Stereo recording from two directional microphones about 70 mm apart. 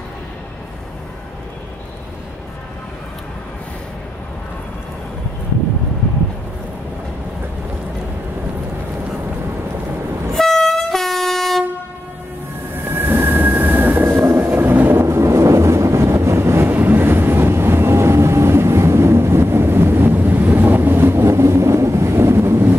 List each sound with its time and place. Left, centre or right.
10.3 s train: centre
12.8 s train: right
14.5 s vehicle: right
16.6 s vehicle: right